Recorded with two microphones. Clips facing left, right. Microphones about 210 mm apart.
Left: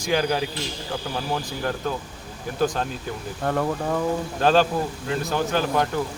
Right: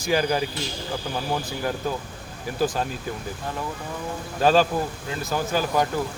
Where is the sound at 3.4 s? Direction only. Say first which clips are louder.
Left 11 dB; 60° left (ahead or behind).